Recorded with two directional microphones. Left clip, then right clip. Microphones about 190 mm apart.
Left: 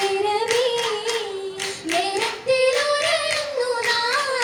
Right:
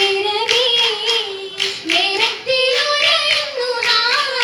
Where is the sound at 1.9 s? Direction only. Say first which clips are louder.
Right 6 dB; 25° left (ahead or behind).